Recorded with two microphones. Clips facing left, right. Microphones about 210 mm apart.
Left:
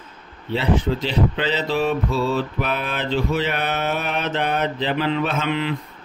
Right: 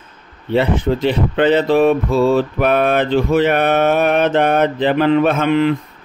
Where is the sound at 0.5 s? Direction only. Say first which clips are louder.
Right 5 dB; 55° right (ahead or behind).